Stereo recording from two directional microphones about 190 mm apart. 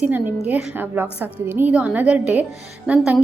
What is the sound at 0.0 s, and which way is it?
A woman's voice, 10° right (ahead or behind).